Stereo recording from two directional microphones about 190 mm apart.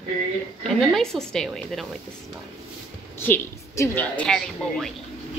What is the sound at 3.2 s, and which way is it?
A woman's voice, 15° left (ahead or behind).